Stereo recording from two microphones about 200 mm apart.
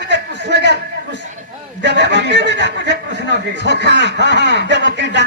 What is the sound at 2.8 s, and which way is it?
Speech, 60° right (ahead or behind).